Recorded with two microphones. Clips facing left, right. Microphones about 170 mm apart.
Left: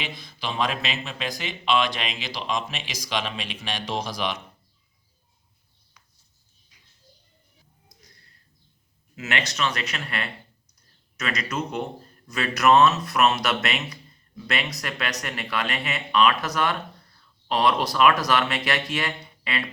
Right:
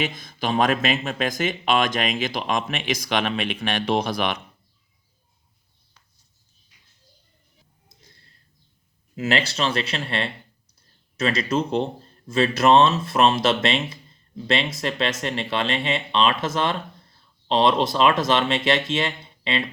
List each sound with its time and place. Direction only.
0.0 s speech: 45° right (ahead or behind)
8.0 s a sound: 25° right (ahead or behind)
9.1 s speech: 30° right (ahead or behind)